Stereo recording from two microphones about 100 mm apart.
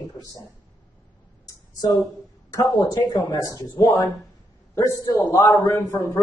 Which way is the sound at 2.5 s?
35° left (ahead or behind).